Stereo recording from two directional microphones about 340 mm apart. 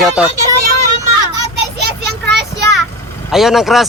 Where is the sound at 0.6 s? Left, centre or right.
Right.